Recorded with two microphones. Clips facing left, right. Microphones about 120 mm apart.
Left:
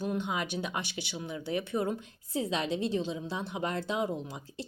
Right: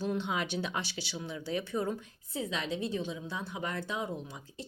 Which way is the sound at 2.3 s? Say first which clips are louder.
Left 4 dB; 30° left (ahead or behind).